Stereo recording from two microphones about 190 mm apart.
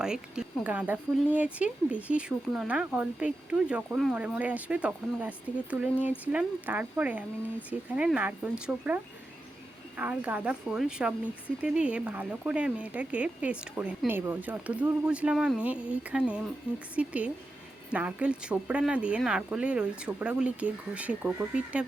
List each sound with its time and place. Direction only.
0.0 s speech: 5° right (ahead or behind)
10.0 s speech: 10° right (ahead or behind)